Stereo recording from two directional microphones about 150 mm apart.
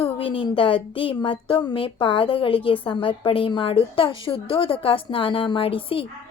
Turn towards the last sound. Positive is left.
turn(degrees=40)  # may be behind; listen again after turning